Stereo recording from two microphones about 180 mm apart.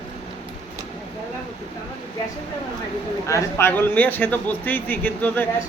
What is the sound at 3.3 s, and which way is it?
A man's voice, 15° left (ahead or behind).